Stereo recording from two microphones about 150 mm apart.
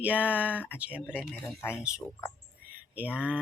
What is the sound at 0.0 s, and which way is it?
Speech, 10° right (ahead or behind).